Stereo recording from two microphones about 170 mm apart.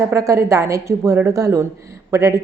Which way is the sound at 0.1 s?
15° right (ahead or behind).